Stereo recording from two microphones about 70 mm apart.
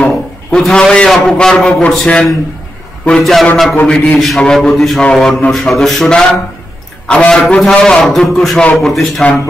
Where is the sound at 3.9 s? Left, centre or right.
Centre.